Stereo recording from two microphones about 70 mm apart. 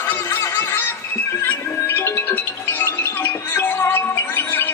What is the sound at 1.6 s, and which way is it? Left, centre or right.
Music, left.